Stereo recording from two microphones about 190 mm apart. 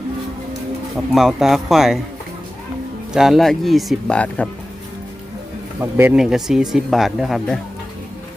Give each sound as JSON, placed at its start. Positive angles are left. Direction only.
{"t": 1.1, "sound": "speech", "side_deg": 0}
{"t": 3.1, "sound": "speech", "side_deg": 0}
{"t": 5.8, "sound": "speech", "side_deg": -10}